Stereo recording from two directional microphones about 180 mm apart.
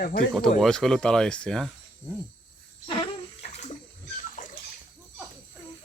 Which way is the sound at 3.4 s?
40° left (ahead or behind).